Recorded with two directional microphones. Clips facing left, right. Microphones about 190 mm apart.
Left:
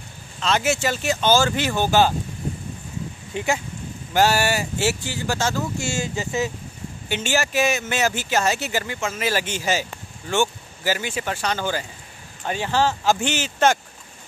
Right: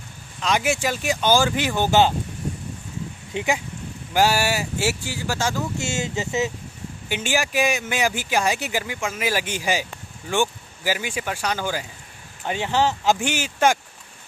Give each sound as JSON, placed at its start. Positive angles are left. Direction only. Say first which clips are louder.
{"t": 0.4, "sound": "speech", "louder": "left 1 dB", "side_deg": -10}
{"t": 3.3, "sound": "speech", "louder": "even", "side_deg": -15}
{"t": 5.8, "sound": "speech", "louder": "even", "side_deg": -20}